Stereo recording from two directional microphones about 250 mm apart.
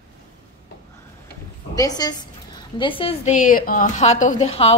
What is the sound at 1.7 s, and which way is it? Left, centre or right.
A woman's voice, centre.